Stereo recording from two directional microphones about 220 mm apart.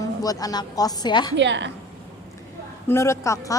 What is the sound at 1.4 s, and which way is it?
Speech, 55° right (ahead or behind).